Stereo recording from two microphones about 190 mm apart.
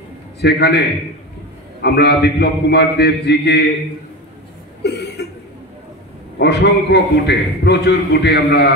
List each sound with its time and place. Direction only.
0.4 s a man's voice: 65° left (ahead or behind)
4.8 s chuckle: 60° left (ahead or behind)
6.3 s a man's voice: 60° left (ahead or behind)